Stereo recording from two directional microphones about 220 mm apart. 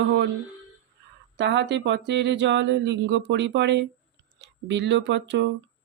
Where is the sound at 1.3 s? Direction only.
50° right (ahead or behind).